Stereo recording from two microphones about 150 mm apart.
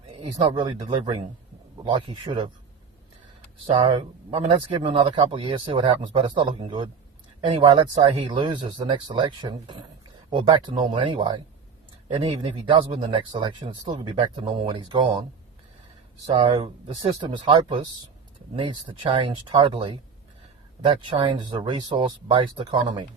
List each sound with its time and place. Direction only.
0.2 s speech: 30° right (ahead or behind)
3.8 s speech: 35° right (ahead or behind)
16.3 s speech: 30° right (ahead or behind)